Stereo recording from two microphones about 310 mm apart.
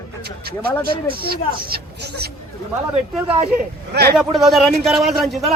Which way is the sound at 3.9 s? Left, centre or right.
Right.